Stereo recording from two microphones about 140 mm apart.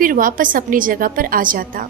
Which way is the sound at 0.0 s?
85° right.